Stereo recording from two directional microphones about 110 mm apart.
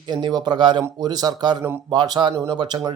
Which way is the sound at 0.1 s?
40° right (ahead or behind).